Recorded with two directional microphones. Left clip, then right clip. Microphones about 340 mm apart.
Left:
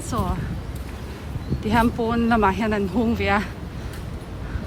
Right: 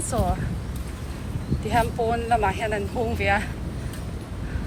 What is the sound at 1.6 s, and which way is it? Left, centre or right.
Speech, centre.